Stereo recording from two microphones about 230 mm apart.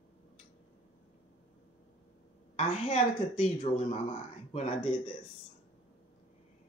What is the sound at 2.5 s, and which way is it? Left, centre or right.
Speech, left.